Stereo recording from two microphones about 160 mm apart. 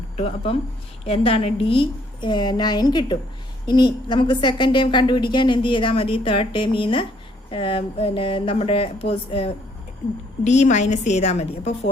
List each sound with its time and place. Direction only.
0.2 s a woman's voice: 40° left (ahead or behind)
10.4 s a woman's voice: 45° left (ahead or behind)